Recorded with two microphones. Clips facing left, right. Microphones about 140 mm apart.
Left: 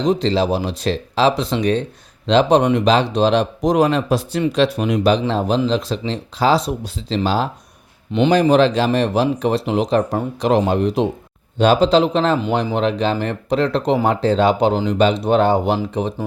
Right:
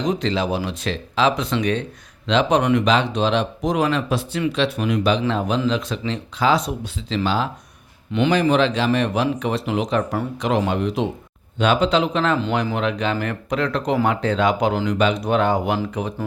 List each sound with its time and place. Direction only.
0.0 s speech: 30° left (ahead or behind)